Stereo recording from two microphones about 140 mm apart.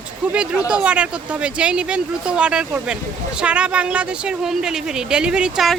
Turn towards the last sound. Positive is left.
turn(degrees=-5)  # may be behind; listen again after turning